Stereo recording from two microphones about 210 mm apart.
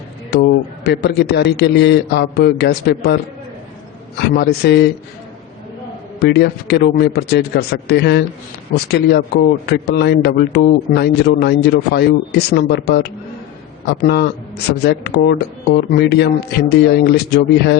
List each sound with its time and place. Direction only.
0.9 s speech: 50° left (ahead or behind)
4.4 s speech: 50° left (ahead or behind)
6.1 s speech: 50° left (ahead or behind)